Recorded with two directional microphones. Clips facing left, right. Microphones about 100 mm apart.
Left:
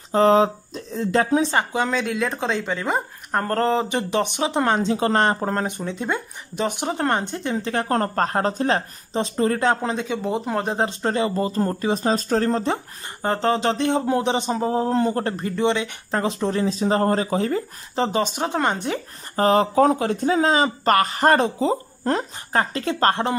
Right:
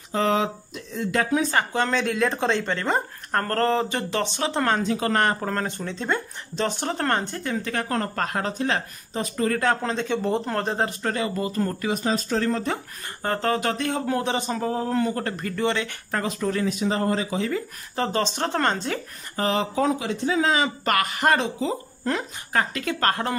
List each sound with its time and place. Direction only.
0.1 s speech: 35° left (ahead or behind)
1.7 s speech: 10° left (ahead or behind); by 17.6 s 40° left (ahead or behind)
17.9 s speech: 20° left (ahead or behind)
19.3 s speech: 40° left (ahead or behind)